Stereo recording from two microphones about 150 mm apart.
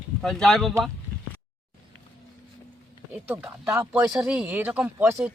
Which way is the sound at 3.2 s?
10° right (ahead or behind).